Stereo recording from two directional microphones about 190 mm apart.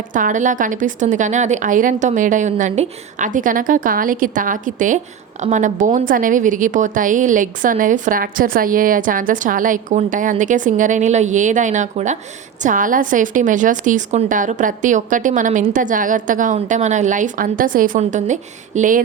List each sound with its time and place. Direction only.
0.1 s a woman's voice: 45° right (ahead or behind)